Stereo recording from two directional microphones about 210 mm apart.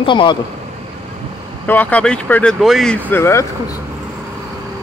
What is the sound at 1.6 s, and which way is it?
Speech, 5° left (ahead or behind).